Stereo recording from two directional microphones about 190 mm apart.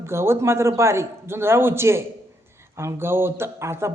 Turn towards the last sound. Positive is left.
turn(degrees=-15)  # may be behind; listen again after turning